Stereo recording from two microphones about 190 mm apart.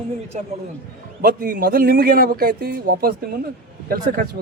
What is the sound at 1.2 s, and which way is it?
A man's voice, 50° right (ahead or behind).